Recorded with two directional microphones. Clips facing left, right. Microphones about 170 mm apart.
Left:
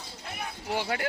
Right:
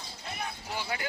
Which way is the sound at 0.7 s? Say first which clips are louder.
Left 7 dB; 65° left (ahead or behind).